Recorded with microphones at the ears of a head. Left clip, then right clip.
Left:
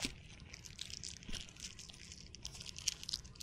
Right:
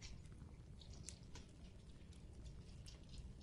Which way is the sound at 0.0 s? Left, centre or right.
Left.